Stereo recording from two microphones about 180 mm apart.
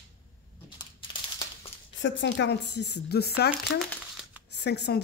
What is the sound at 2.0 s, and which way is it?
Speech, 75° left (ahead or behind).